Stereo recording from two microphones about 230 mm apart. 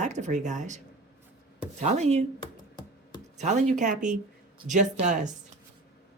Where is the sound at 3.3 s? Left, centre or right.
Right.